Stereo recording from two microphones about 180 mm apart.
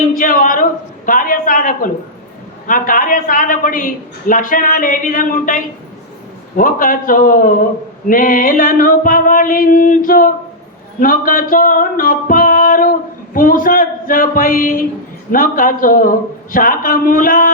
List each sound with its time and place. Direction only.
0.1 s a sound: 50° left (ahead or behind)
2.6 s a woman's voice: 50° left (ahead or behind)
6.6 s a woman's voice: 50° left (ahead or behind)
11.0 s music: 50° left (ahead or behind)
13.3 s a woman's voice: 50° left (ahead or behind)